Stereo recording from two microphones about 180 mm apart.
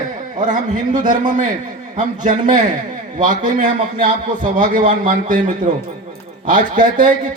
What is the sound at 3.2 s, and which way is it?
Speech, 45° right (ahead or behind).